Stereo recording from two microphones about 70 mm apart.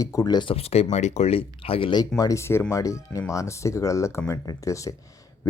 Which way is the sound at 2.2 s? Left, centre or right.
Left.